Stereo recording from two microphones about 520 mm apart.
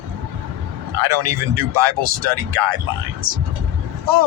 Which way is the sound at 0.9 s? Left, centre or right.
Right.